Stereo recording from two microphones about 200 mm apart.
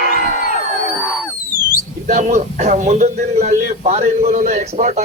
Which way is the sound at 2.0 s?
40° right (ahead or behind).